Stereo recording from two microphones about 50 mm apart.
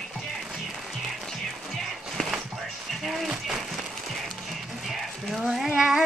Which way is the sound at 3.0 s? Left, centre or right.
Centre.